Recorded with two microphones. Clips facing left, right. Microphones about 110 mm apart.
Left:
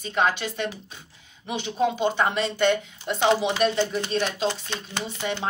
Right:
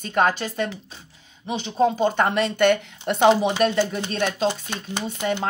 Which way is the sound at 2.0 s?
50° right (ahead or behind).